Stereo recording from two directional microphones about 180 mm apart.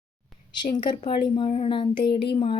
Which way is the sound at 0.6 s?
25° left (ahead or behind).